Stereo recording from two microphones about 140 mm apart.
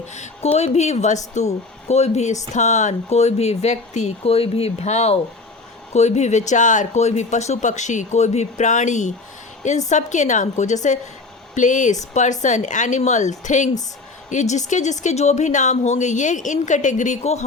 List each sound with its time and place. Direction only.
0.1 s speech: 50° left (ahead or behind)